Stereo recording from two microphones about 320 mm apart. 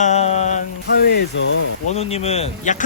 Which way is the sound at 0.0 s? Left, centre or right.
Left.